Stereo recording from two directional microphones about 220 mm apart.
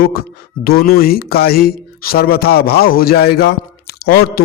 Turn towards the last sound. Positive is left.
turn(degrees=45)  # may be behind; listen again after turning